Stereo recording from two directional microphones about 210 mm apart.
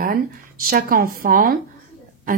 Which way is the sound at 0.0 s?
45° right (ahead or behind).